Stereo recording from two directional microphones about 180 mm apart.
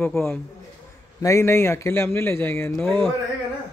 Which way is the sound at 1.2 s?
15° left (ahead or behind).